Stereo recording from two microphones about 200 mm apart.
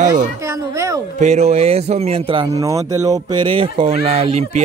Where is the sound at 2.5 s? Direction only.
15° right (ahead or behind).